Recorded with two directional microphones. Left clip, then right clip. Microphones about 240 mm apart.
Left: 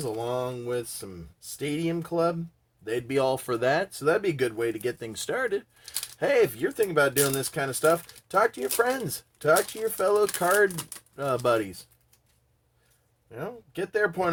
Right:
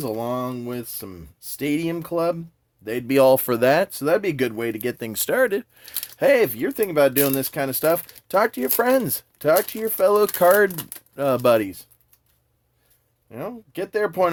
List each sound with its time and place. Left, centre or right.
0.0 s speech: right
10.8 s speech: centre
11.1 s speech: right
13.3 s speech: right